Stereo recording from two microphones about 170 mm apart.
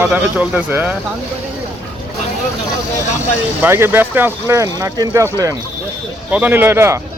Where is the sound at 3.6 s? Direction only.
15° right (ahead or behind).